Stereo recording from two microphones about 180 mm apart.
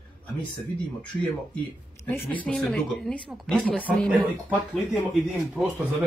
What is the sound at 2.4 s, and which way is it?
Speech, 5° left (ahead or behind).